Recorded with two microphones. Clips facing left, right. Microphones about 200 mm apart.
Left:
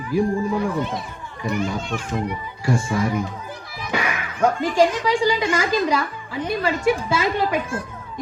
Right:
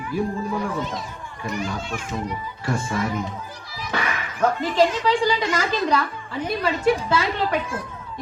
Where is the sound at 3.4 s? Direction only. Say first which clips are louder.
Left 3 dB; 55° left (ahead or behind).